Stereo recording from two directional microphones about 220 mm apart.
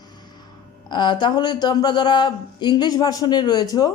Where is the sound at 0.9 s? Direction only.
20° left (ahead or behind).